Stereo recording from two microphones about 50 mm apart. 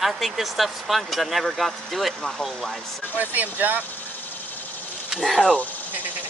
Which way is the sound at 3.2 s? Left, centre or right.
Right.